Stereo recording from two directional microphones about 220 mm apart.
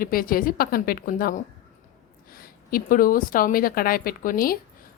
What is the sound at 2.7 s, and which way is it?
A woman's voice, 40° left (ahead or behind).